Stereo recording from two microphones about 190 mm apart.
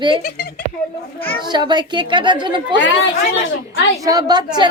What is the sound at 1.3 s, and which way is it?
A woman's voice, 25° right (ahead or behind).